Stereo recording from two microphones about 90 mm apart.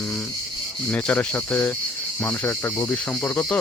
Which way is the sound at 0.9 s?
15° left (ahead or behind).